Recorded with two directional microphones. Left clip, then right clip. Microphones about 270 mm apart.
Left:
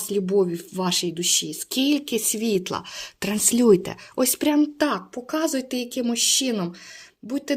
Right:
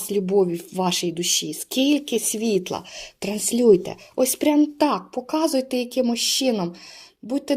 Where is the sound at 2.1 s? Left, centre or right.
Left.